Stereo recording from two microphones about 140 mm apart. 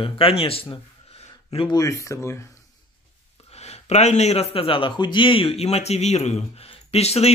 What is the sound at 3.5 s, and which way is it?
A man's voice, 50° left (ahead or behind).